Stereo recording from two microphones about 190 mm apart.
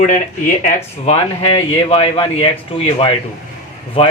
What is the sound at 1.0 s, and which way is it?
Speech, 30° left (ahead or behind).